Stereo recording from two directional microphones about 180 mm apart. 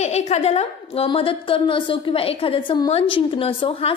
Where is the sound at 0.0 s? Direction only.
40° left (ahead or behind).